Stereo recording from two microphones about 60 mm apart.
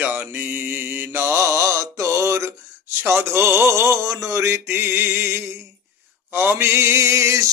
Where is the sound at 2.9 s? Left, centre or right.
Right.